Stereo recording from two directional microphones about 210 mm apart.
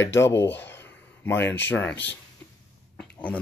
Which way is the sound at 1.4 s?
10° left (ahead or behind).